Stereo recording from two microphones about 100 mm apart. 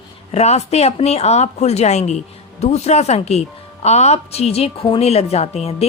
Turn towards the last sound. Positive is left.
turn(degrees=90)